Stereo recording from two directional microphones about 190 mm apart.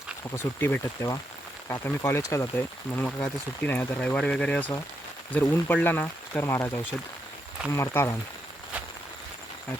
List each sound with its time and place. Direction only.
0.3 s speech: 10° left (ahead or behind)
7.7 s speech: 15° left (ahead or behind)